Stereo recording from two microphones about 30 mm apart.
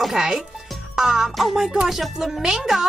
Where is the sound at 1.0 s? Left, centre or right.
Centre.